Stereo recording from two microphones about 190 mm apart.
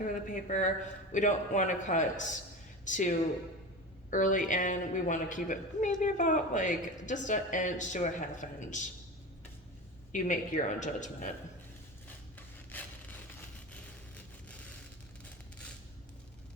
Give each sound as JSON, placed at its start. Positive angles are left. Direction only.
{"t": 0.0, "sound": "a woman's voice", "side_deg": 40}
{"t": 10.1, "sound": "a woman's voice", "side_deg": 40}
{"t": 12.7, "sound": "a sound", "side_deg": 10}